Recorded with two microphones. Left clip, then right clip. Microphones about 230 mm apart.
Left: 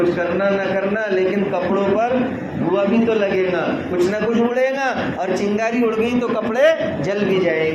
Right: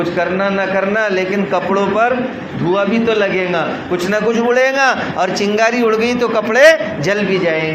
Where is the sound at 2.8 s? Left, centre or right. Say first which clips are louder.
Right 3 dB; right.